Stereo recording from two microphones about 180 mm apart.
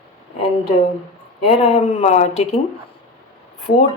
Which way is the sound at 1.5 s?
35° left (ahead or behind).